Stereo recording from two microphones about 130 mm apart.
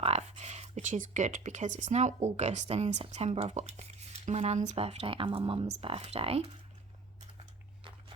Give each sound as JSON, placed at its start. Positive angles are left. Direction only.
{"t": 0.0, "sound": "speech", "side_deg": -55}